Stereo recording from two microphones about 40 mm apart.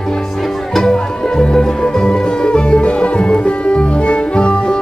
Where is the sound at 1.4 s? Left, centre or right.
Centre.